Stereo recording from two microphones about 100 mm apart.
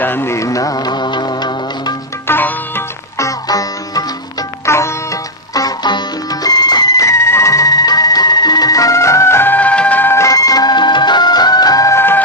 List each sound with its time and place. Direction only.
0.0 s music: 20° left (ahead or behind); by 2.0 s 45° left (ahead or behind)
2.2 s sitar: 20° left (ahead or behind)
3.2 s music: 35° left (ahead or behind); by 10.1 s 15° left (ahead or behind)
10.1 s music: 35° left (ahead or behind)